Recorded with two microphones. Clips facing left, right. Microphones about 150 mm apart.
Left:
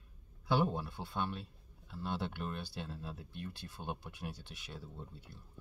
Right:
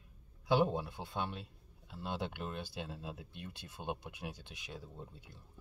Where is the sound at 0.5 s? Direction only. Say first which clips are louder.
Right 2 dB; 20° right (ahead or behind).